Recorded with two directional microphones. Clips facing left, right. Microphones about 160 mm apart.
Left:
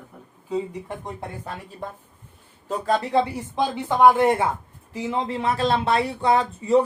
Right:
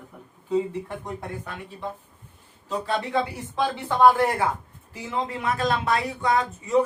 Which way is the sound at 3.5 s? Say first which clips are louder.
Left 2 dB; 15° left (ahead or behind).